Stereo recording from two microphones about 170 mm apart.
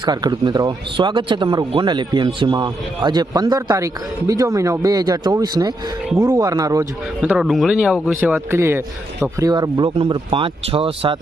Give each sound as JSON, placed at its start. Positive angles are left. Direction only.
{"t": 0.0, "sound": "a man's voice", "side_deg": -25}
{"t": 7.2, "sound": "a man's voice", "side_deg": -5}